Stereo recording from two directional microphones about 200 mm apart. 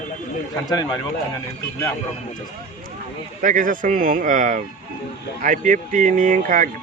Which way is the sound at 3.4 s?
40° right (ahead or behind).